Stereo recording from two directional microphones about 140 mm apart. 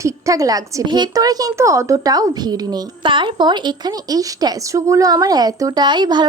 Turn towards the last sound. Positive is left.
turn(degrees=-30)  # may be behind; listen again after turning